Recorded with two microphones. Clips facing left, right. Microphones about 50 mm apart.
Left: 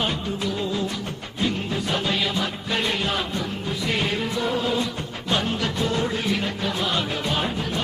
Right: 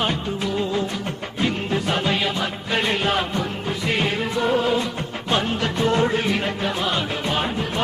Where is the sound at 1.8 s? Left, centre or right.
Right.